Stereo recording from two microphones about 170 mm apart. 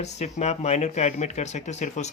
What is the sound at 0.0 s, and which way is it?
Speech, 40° left (ahead or behind).